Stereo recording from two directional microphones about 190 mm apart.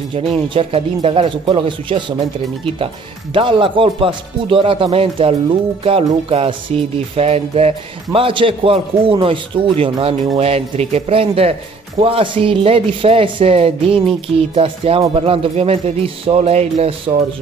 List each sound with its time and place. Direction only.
0.6 s speech: 30° right (ahead or behind)
3.3 s speech: 25° right (ahead or behind)